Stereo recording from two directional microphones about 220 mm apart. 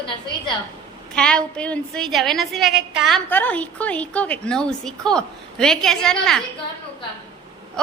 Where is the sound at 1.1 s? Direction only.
5° left (ahead or behind).